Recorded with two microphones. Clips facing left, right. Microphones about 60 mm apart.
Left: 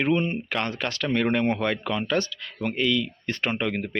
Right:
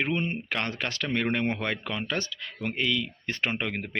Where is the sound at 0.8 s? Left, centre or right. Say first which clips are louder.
Left 2 dB; right.